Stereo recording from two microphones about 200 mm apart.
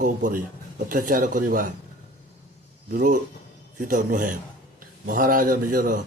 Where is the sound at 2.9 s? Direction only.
45° right (ahead or behind).